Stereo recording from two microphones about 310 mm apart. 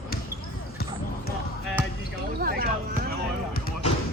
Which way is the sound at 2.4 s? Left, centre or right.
Right.